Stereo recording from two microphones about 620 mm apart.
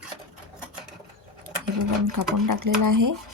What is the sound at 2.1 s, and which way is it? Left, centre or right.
A woman's voice, right.